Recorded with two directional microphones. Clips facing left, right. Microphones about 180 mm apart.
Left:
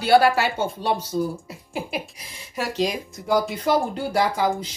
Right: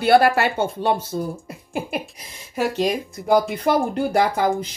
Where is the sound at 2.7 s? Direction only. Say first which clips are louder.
Right 3 dB; 60° right (ahead or behind).